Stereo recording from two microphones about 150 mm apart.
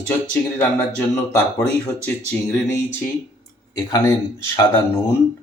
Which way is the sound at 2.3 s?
15° left (ahead or behind).